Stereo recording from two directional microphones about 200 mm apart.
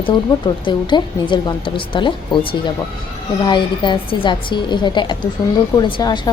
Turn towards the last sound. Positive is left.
turn(degrees=25)  # may be behind; listen again after turning